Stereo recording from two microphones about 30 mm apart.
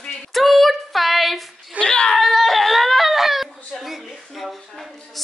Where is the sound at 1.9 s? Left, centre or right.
Left.